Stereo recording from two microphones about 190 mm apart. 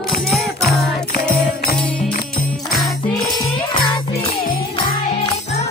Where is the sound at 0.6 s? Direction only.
Centre (ahead or behind).